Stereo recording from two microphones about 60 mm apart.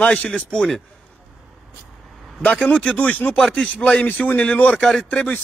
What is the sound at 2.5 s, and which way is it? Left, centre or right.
A man's voice, centre.